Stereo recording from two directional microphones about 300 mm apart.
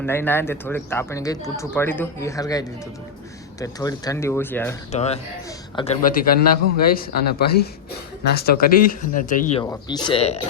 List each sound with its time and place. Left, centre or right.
0.0 s speech: centre
4.9 s speech: left
9.6 s speech: centre